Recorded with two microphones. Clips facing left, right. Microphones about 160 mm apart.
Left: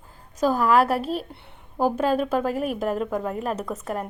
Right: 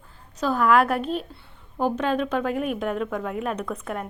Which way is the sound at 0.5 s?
35° left (ahead or behind).